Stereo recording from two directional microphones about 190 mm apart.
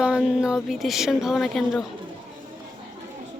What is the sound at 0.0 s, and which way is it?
Speech, 5° right (ahead or behind).